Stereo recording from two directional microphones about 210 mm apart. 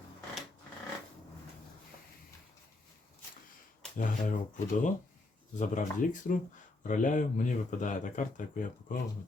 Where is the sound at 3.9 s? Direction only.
40° left (ahead or behind).